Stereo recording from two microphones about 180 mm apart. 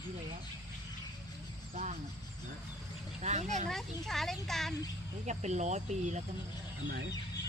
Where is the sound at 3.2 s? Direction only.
40° right (ahead or behind).